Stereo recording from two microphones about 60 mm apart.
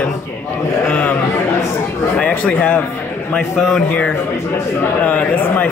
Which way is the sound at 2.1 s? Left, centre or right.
Left.